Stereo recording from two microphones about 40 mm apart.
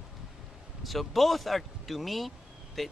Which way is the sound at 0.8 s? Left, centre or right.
Centre.